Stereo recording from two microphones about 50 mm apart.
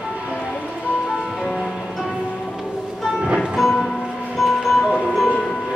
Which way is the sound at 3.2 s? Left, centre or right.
Centre.